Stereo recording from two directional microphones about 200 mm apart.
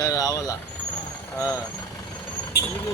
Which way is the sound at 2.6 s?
55° left (ahead or behind).